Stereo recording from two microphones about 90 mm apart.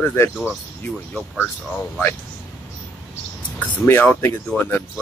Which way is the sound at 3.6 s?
20° left (ahead or behind).